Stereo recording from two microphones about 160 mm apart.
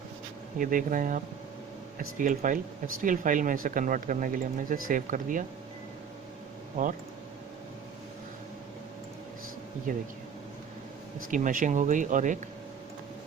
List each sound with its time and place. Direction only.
0.6 s speech: 60° right (ahead or behind)
6.8 s speech: 55° right (ahead or behind)
9.9 s speech: 55° right (ahead or behind)
11.3 s speech: 55° right (ahead or behind)